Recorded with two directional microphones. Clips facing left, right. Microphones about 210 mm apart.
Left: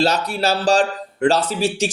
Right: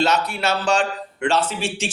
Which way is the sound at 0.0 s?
35° left (ahead or behind).